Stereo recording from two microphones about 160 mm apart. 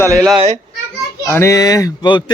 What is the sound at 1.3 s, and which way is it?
Speech, 20° left (ahead or behind).